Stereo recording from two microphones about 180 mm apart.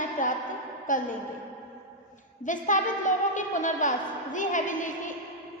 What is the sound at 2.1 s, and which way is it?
A woman's voice, 45° left (ahead or behind).